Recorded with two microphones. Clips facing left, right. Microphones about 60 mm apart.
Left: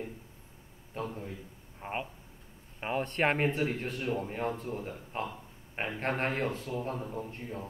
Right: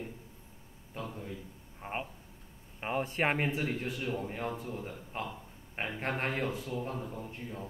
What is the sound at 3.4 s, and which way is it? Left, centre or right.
Speech, left.